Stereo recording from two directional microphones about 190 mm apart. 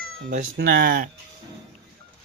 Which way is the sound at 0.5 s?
55° right (ahead or behind).